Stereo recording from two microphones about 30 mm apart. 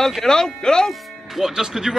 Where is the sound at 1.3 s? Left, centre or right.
Centre.